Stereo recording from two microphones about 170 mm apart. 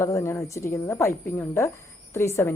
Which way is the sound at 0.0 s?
15° left (ahead or behind).